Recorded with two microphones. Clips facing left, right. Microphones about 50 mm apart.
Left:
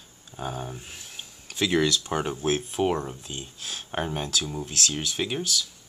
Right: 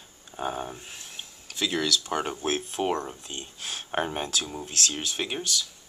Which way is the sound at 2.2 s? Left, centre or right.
Centre.